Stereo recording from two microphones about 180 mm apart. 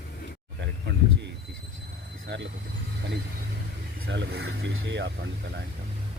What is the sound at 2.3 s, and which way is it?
Speech, 75° right (ahead or behind).